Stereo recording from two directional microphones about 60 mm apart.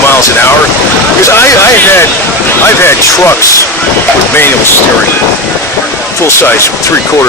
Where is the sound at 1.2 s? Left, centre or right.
Left.